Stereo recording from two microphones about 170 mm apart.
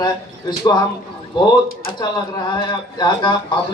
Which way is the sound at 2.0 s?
25° left (ahead or behind).